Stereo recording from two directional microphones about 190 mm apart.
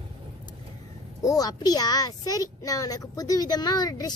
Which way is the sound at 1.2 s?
20° left (ahead or behind).